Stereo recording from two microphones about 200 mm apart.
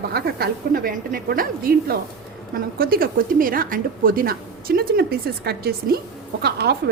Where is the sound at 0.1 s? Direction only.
50° right (ahead or behind).